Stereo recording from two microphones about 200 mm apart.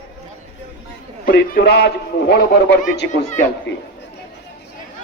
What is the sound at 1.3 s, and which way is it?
A man's voice, 55° left (ahead or behind).